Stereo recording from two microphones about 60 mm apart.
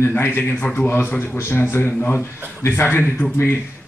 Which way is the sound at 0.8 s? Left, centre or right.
Left.